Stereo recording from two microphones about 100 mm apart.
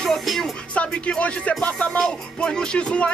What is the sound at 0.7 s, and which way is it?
Speech, 10° left (ahead or behind).